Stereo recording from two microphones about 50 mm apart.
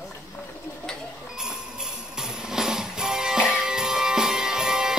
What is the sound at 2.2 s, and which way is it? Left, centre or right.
Music, centre.